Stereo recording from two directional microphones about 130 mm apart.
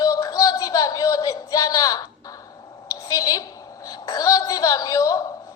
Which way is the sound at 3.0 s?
25° left (ahead or behind).